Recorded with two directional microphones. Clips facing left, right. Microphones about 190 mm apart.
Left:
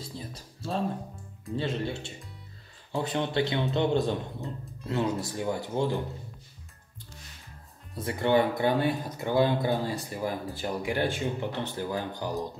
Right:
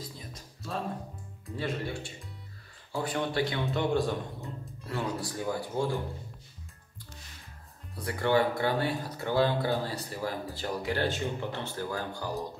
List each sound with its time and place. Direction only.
0.0 s music: 30° left (ahead or behind)
1.6 s speech: 25° left (ahead or behind)
8.0 s speech: 20° left (ahead or behind)